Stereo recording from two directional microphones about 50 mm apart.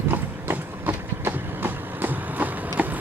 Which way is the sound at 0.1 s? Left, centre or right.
Right.